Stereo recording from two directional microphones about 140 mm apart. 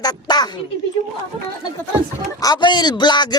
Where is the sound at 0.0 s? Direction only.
30° left (ahead or behind).